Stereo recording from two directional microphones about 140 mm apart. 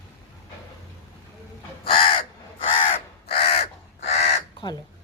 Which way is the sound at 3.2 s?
45° left (ahead or behind).